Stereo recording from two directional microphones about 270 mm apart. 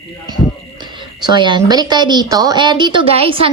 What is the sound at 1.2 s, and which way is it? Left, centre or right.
A woman's voice, centre.